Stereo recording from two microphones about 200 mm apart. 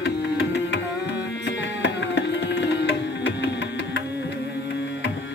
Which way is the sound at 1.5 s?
60° left (ahead or behind).